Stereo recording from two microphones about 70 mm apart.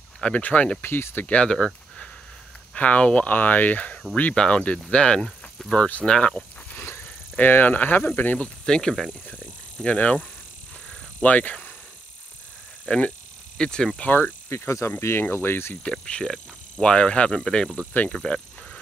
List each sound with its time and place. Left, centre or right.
0.2 s speech: left
0.8 s speech: left
1.2 s speech: centre
6.7 s speech: left
8.6 s speech: centre
9.3 s bicycle: centre
11.2 s speech: left
12.8 s speech: centre
13.9 s speech: left
15.0 s speech: left
15.8 s speech: centre
18.2 s a sound: centre